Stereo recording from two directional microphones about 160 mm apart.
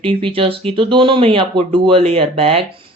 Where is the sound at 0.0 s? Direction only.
35° right (ahead or behind).